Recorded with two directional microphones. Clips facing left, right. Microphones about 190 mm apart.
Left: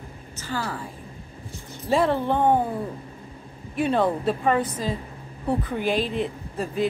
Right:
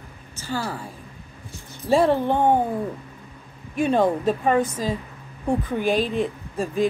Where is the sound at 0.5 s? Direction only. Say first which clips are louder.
Right 2 dB; 10° right (ahead or behind).